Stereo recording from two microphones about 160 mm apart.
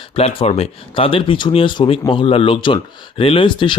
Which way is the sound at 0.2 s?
40° left (ahead or behind).